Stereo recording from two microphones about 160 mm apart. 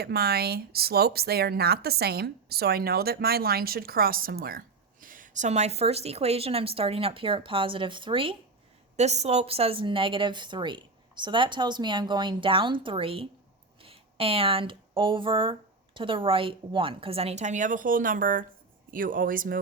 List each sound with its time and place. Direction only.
0.0 s speech: 80° right; by 19.5 s 60° right (ahead or behind)